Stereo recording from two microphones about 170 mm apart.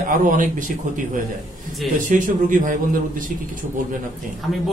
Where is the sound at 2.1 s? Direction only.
50° right (ahead or behind).